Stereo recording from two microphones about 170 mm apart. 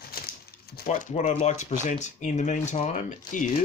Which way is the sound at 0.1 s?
60° left (ahead or behind).